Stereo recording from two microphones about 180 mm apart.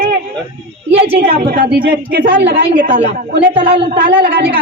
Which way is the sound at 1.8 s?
65° right (ahead or behind).